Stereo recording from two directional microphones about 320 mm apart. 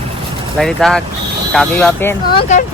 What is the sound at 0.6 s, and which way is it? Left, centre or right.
Speech, centre.